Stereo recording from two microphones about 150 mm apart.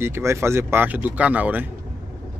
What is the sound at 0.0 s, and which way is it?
Speech, 15° right (ahead or behind).